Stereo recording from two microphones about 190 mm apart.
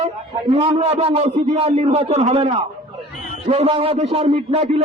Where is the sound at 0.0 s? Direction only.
30° right (ahead or behind).